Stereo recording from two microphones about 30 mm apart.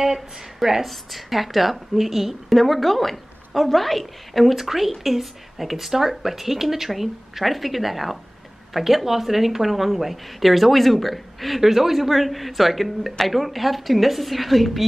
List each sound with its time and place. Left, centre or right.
0.0 s speech: centre
0.8 s speech: centre
2.5 s speech: centre
11.6 s speech: centre